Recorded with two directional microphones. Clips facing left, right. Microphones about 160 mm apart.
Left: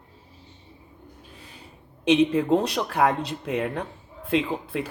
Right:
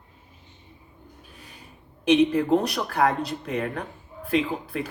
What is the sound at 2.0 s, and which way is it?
A woman's voice, 25° left (ahead or behind).